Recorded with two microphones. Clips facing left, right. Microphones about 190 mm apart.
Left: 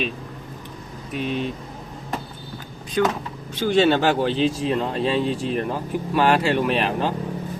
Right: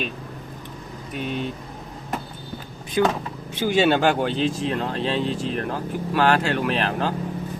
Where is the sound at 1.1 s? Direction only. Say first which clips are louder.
Left 3 dB; centre (ahead or behind).